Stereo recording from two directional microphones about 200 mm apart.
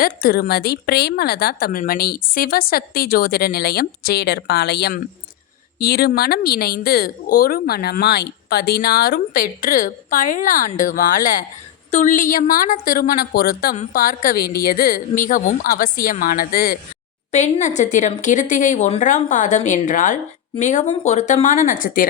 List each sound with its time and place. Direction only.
0.0 s a woman's voice: 50° left (ahead or behind)